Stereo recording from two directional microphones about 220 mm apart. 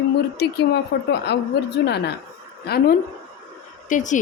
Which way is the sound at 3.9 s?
35° left (ahead or behind).